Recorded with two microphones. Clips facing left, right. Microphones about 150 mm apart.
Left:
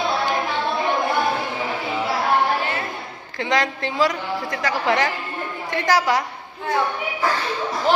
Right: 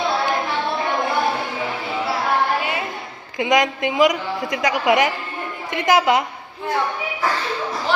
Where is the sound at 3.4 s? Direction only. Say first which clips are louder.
Right 4 dB; 15° right (ahead or behind).